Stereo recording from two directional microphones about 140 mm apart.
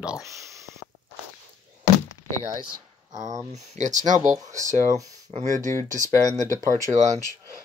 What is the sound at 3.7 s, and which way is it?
Speech, 60° right (ahead or behind).